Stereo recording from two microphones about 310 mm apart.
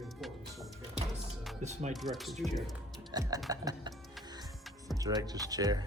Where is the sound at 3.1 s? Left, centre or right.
Centre.